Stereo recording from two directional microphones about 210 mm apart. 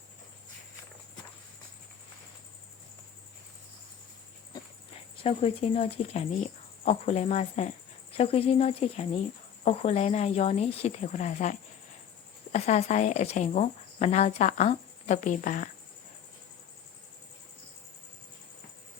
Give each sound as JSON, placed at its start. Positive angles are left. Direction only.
{"t": 5.1, "sound": "speech", "side_deg": 25}